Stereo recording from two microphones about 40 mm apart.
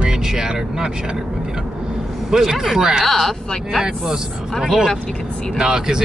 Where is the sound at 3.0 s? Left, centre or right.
Centre.